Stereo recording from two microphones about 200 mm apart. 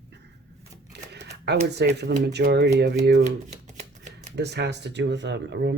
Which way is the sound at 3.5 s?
35° right (ahead or behind).